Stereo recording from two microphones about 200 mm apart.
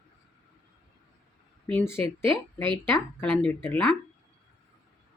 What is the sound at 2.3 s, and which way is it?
Speech, 25° right (ahead or behind).